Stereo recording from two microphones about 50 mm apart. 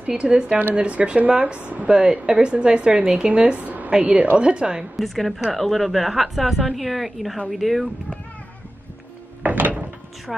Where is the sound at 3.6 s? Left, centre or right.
Right.